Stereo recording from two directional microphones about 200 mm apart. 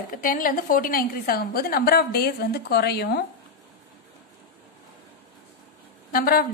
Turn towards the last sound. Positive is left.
turn(degrees=45)  # may be behind; listen again after turning